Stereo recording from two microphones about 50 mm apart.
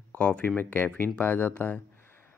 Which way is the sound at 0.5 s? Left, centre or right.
Left.